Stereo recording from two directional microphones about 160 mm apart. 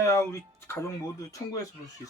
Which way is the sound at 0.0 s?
20° left (ahead or behind).